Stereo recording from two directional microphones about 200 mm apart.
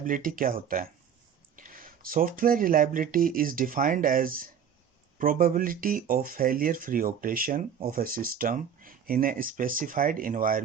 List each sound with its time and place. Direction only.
0.0 s speech: 45° right (ahead or behind)